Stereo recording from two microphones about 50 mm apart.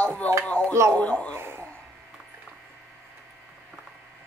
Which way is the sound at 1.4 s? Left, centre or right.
Right.